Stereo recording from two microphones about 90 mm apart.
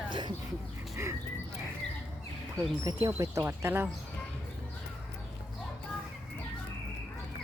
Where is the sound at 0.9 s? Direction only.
30° right (ahead or behind).